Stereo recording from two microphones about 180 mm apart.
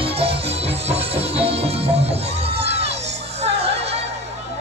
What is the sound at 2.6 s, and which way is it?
Crowd, 35° right (ahead or behind).